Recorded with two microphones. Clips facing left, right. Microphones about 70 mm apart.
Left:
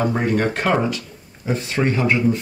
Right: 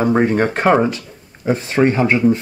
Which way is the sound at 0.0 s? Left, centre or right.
Right.